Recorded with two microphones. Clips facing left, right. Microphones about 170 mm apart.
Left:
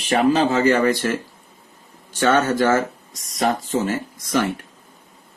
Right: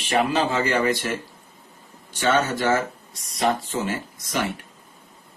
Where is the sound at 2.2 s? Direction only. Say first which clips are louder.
Left 4 dB; 45° left (ahead or behind).